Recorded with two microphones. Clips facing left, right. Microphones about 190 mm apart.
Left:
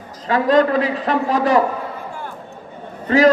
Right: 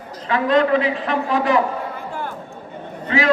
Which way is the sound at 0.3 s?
40° left (ahead or behind).